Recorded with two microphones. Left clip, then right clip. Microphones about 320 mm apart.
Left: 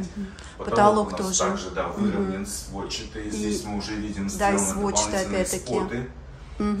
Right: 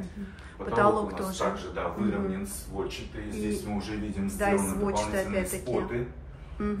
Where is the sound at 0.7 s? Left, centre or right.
Centre.